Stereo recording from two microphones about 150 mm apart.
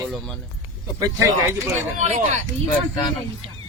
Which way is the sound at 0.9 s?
25° right (ahead or behind).